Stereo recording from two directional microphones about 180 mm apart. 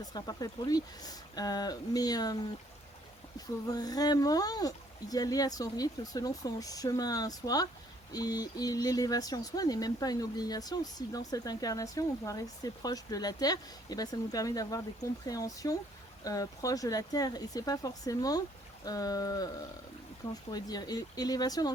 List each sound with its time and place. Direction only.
0.0 s speech: 20° left (ahead or behind)
20.5 s speech: 20° left (ahead or behind)